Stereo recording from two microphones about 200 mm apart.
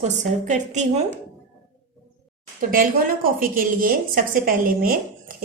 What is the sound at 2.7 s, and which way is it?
A woman's voice, 45° right (ahead or behind).